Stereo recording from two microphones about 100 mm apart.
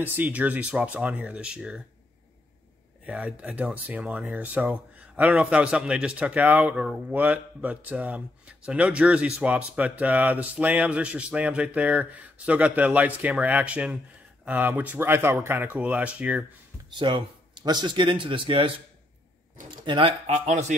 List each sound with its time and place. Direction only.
0.0 s a man's voice: 20° right (ahead or behind)
3.1 s a man's voice: 10° right (ahead or behind)
17.0 s speech: 50° right (ahead or behind)
19.9 s speech: 65° right (ahead or behind)